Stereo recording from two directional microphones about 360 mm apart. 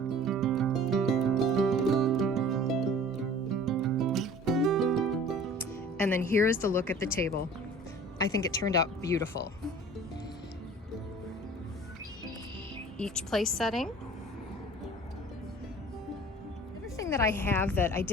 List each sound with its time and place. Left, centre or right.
0.2 s music: centre
8.2 s a woman's voice: centre
13.0 s a woman's voice: centre
17.0 s a woman's voice: centre